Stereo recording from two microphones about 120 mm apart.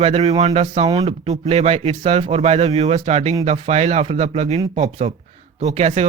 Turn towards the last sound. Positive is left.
turn(degrees=-65)  # may be behind; listen again after turning